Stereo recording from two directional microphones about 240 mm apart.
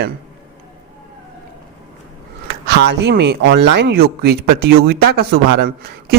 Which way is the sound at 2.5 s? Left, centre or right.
Right.